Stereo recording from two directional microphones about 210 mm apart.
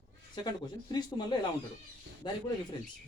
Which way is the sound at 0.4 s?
20° left (ahead or behind).